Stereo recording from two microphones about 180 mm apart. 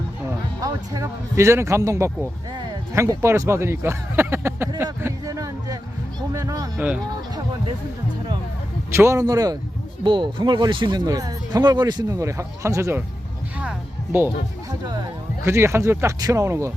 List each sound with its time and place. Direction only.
0.6 s speech: 15° right (ahead or behind)
4.9 s a sound: 15° right (ahead or behind)
6.3 s speech: 20° right (ahead or behind)
6.7 s speech: 5° right (ahead or behind)
8.9 s speech: 15° right (ahead or behind)
13.6 s music: 10° right (ahead or behind)
14.8 s speech: 20° right (ahead or behind)